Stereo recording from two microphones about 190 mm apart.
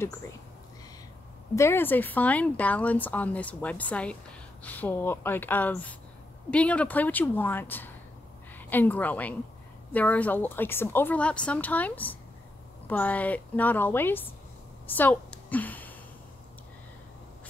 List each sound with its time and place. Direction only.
1.5 s a woman's voice: 15° left (ahead or behind)